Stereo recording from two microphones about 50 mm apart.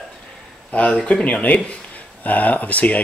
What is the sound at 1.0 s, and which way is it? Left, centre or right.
Speech, left.